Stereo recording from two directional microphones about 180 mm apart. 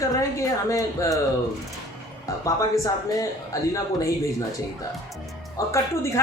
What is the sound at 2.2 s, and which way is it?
A woman's voice, 15° left (ahead or behind).